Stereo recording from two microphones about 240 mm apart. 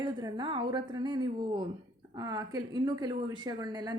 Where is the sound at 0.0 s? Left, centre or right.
Centre.